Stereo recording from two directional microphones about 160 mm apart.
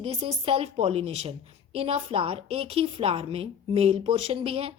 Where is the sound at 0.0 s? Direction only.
35° right (ahead or behind).